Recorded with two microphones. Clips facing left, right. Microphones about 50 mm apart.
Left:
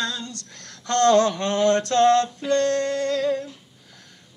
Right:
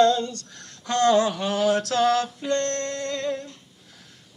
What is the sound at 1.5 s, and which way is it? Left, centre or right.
Speech, centre.